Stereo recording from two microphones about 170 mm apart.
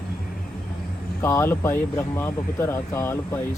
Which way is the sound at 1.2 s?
20° left (ahead or behind).